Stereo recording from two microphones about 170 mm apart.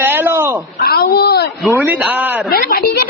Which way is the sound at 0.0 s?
10° right (ahead or behind).